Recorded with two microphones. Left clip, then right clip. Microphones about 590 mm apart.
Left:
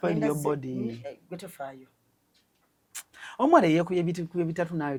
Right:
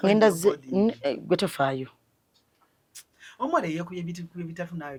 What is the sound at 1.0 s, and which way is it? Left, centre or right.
Speech, right.